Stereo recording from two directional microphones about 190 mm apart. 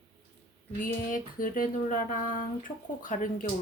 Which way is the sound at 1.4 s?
45° left (ahead or behind).